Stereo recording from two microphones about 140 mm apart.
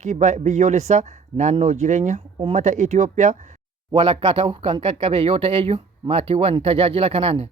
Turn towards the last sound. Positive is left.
turn(degrees=-45)  # may be behind; listen again after turning